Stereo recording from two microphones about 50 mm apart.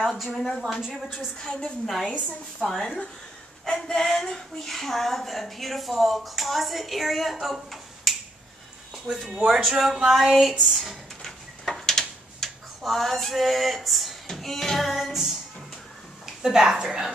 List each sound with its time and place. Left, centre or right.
0.0 s a woman's voice: centre
1.4 s speech: centre
2.0 s speech: centre
2.6 s a woman's voice: centre
9.1 s a woman's voice: centre
10.7 s a sound: centre
16.4 s speech: centre